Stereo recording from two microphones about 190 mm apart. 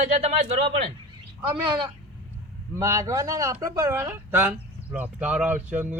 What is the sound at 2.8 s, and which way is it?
Speech, 15° right (ahead or behind).